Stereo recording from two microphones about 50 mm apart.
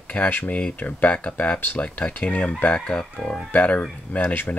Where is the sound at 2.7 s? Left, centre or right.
Centre.